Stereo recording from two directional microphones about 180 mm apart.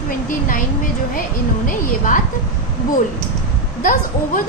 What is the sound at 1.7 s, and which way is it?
Speech, 45° left (ahead or behind).